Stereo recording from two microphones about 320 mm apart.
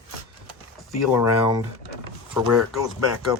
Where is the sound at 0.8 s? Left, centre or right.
Centre.